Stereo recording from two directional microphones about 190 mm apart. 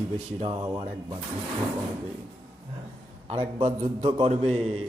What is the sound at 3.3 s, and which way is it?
A man's voice, 30° right (ahead or behind).